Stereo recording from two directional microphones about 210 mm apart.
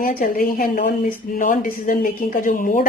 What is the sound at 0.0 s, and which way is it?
A woman's voice, 40° left (ahead or behind).